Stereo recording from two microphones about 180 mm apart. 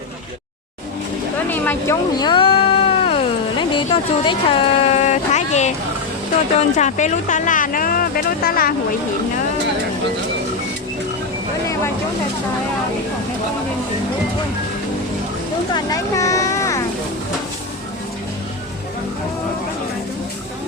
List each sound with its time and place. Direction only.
1.5 s speech: 10° left (ahead or behind)
2.1 s a sound: 25° left (ahead or behind)
3.6 s speech: 25° left (ahead or behind); by 8.7 s 55° left (ahead or behind)
15.7 s speech: 20° left (ahead or behind)